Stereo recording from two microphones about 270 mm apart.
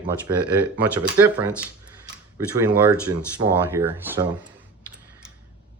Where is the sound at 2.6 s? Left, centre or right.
Centre.